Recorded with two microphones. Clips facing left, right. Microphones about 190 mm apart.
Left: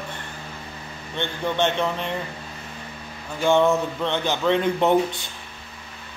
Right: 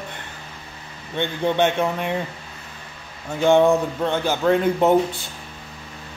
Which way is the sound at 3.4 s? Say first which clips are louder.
Right 3 dB; 15° right (ahead or behind).